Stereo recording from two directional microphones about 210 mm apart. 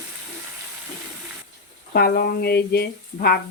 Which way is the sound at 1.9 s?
45° left (ahead or behind).